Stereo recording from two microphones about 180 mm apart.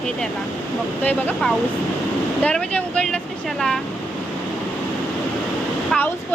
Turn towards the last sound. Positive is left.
turn(degrees=10)  # may be behind; listen again after turning